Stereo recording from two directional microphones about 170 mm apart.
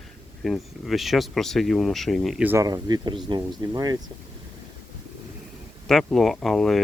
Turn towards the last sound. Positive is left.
turn(degrees=0)  # may be behind; listen again after turning